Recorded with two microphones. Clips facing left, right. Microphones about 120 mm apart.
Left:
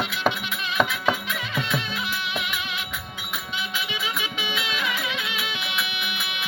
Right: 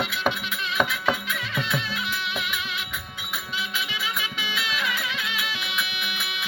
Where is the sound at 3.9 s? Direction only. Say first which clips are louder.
Left 1 dB; centre (ahead or behind).